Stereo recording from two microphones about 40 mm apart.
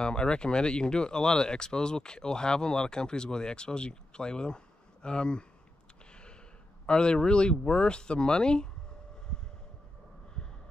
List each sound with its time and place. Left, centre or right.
0.0 s speech: left
6.9 s speech: left